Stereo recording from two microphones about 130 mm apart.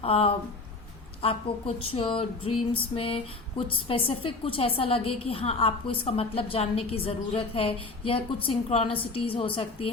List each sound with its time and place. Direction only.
0.0 s a woman's voice: 45° left (ahead or behind)